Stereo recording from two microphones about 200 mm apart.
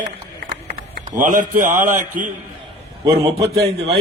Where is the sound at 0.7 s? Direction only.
45° right (ahead or behind).